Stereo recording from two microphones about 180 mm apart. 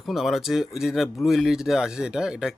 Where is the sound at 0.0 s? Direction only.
Centre (ahead or behind).